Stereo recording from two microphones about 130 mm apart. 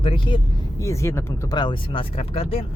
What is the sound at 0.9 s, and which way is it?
Speech, 25° left (ahead or behind).